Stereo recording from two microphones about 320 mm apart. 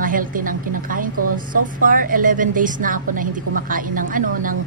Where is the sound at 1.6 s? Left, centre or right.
Right.